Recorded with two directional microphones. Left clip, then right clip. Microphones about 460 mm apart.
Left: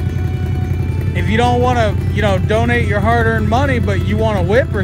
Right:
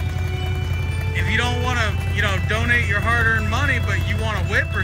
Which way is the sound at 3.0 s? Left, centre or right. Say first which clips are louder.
Left 4 dB; left.